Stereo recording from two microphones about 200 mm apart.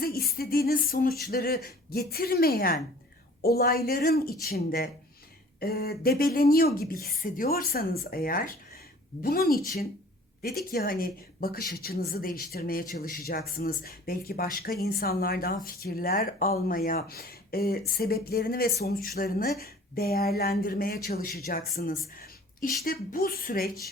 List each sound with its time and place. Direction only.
0.0 s a woman's voice: 50° left (ahead or behind)
10.7 s a woman's voice: 45° left (ahead or behind)
22.1 s a sound: 45° left (ahead or behind)
22.8 s a woman's voice: 45° left (ahead or behind)